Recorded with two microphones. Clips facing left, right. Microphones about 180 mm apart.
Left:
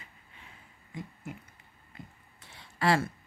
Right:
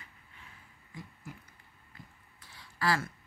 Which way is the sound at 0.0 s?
20° left (ahead or behind).